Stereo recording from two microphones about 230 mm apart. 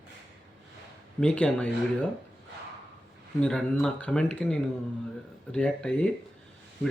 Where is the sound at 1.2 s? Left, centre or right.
Centre.